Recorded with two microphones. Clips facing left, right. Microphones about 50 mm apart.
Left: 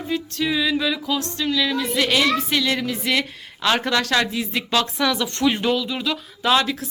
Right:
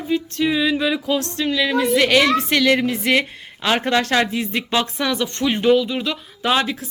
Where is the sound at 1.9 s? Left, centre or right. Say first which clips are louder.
Right 4 dB; right.